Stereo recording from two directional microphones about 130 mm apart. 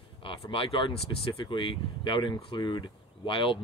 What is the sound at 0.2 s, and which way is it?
Speech, 45° left (ahead or behind).